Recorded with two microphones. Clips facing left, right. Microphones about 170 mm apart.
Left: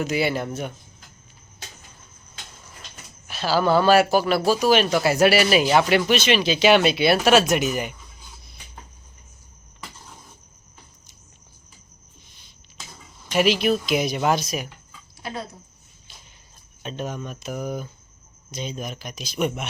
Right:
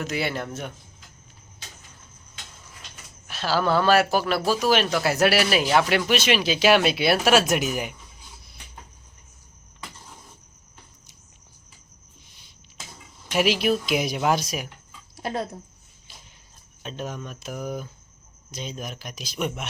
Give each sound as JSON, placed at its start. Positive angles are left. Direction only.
{"t": 0.0, "sound": "a man's voice", "side_deg": 5}
{"t": 3.2, "sound": "a man's voice", "side_deg": 0}
{"t": 13.3, "sound": "a man's voice", "side_deg": -5}
{"t": 15.2, "sound": "speech", "side_deg": -45}
{"t": 16.8, "sound": "a man's voice", "side_deg": 0}